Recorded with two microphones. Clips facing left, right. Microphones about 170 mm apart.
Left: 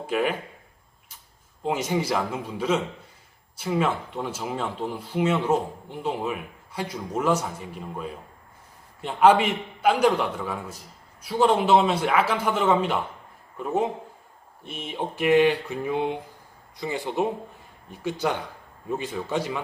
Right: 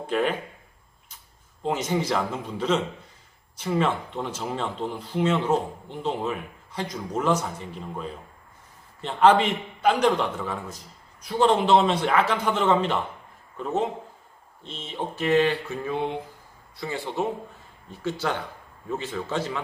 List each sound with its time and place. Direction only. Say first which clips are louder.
0.1 s speech: even; 10° left (ahead or behind)
1.6 s speech: even; 10° left (ahead or behind)